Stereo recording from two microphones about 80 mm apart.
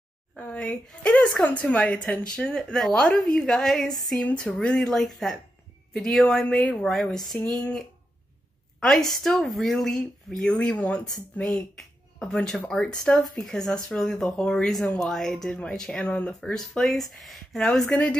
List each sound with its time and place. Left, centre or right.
0.4 s speech: centre
8.7 s a sound: centre
9.1 s speech: centre
11.4 s speech: centre
17.8 s speech: centre